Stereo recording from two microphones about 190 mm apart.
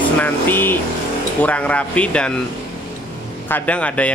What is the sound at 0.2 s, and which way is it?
A man's voice, 10° left (ahead or behind).